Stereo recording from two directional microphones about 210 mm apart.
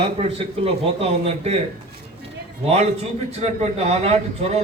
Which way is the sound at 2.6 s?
30° right (ahead or behind).